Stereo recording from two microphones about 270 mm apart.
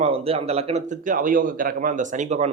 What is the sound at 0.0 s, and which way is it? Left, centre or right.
Speech, right.